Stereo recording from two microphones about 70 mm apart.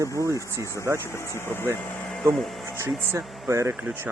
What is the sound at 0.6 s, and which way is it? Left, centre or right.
Speech, left.